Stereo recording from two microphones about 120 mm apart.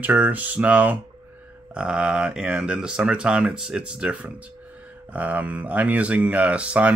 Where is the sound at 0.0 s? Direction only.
15° right (ahead or behind).